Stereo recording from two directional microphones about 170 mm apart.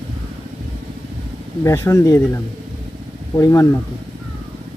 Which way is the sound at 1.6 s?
15° left (ahead or behind).